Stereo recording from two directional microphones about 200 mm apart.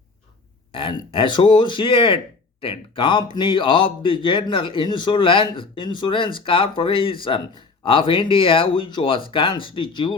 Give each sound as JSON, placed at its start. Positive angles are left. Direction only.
{"t": 0.7, "sound": "speech", "side_deg": 25}